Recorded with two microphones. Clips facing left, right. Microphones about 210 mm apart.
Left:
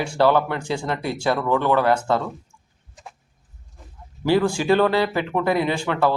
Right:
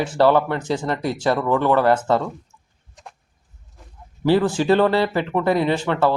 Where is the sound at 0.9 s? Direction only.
40° right (ahead or behind).